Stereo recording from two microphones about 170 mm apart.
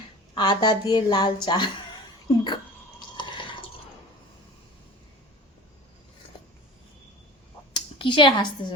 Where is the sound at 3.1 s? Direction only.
25° left (ahead or behind).